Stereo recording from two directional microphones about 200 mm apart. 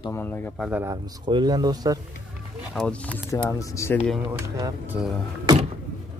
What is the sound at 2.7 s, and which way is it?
Speech, 5° left (ahead or behind).